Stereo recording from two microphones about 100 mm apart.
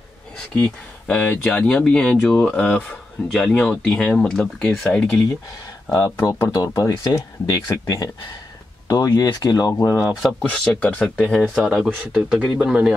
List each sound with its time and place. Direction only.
0.6 s speech: 5° left (ahead or behind)
5.9 s speech: 25° left (ahead or behind)
10.5 s speech: 10° left (ahead or behind)
11.4 s speech: 5° right (ahead or behind)